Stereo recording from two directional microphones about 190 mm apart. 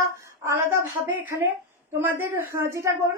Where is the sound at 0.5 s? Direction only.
15° right (ahead or behind).